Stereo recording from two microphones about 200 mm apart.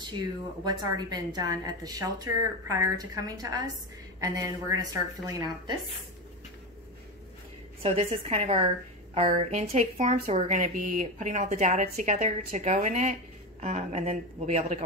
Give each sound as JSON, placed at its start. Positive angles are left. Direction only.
{"t": 0.7, "sound": "a woman's voice", "side_deg": -20}
{"t": 7.8, "sound": "a woman's voice", "side_deg": -30}